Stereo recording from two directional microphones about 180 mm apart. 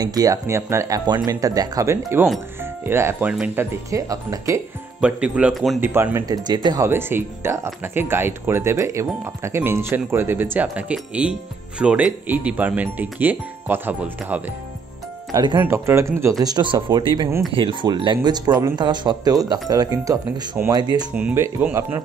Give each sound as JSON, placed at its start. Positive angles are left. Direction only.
{"t": 0.0, "sound": "speech", "side_deg": -20}
{"t": 5.0, "sound": "speech", "side_deg": -5}
{"t": 5.8, "sound": "speech", "side_deg": -10}
{"t": 15.3, "sound": "speech", "side_deg": -25}
{"t": 21.1, "sound": "speech", "side_deg": -5}